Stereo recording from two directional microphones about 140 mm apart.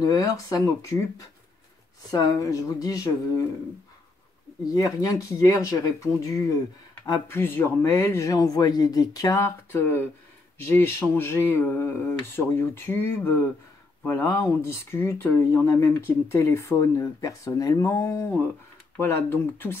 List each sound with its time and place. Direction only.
0.0 s speech: 25° left (ahead or behind)
4.7 s speech: 25° left (ahead or behind)